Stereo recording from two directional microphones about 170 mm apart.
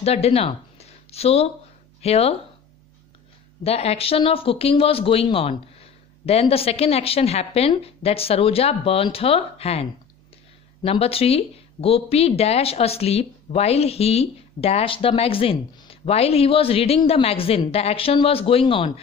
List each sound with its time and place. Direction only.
0.0 s a sound: 35° left (ahead or behind)
2.0 s speech: 35° left (ahead or behind)
3.6 s speech: 35° left (ahead or behind)